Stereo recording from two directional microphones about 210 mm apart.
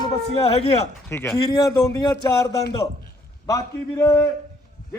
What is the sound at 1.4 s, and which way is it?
A man's voice, 15° left (ahead or behind).